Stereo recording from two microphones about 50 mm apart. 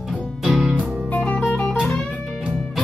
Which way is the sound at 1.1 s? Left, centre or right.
Left.